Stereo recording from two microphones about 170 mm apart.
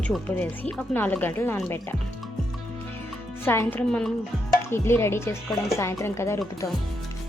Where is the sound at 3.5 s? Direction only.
10° left (ahead or behind).